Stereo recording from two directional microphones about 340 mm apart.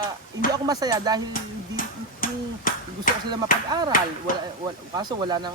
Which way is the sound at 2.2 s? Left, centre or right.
Left.